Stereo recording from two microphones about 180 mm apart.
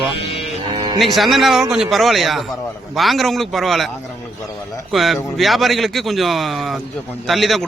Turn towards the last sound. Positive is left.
turn(degrees=0)  # may be behind; listen again after turning